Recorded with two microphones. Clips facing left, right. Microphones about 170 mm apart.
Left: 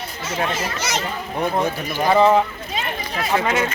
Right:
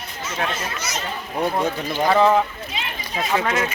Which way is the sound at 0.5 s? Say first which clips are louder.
Left 4 dB; 90° left.